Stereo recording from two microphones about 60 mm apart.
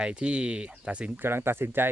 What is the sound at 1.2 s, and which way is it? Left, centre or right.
Speech, right.